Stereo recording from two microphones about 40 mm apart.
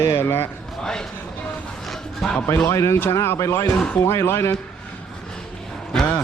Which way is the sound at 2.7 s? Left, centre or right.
Left.